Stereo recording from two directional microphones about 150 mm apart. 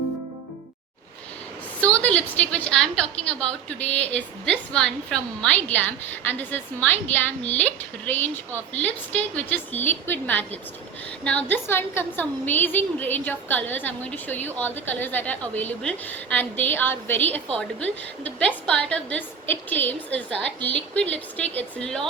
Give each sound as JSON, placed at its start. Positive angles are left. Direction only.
{"t": 1.8, "sound": "a woman's voice", "side_deg": 10}